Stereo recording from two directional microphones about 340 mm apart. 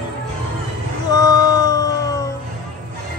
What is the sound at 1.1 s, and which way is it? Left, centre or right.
Music, centre.